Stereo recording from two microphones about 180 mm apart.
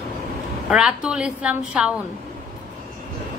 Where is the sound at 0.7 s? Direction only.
5° right (ahead or behind).